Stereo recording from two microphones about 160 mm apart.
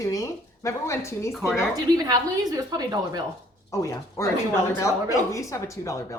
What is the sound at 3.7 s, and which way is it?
Speech, 20° left (ahead or behind).